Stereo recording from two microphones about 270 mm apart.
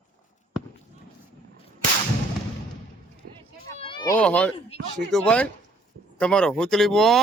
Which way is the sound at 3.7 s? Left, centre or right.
Centre.